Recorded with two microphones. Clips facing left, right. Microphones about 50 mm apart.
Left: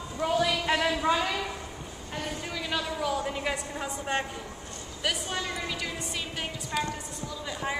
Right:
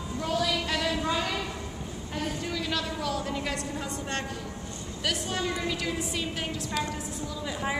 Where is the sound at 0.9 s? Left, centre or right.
Centre.